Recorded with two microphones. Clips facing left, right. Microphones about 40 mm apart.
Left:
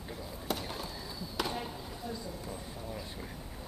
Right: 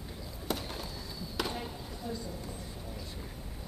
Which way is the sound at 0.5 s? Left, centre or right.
Centre.